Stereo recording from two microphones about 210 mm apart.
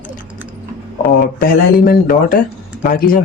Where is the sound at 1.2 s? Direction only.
45° left (ahead or behind).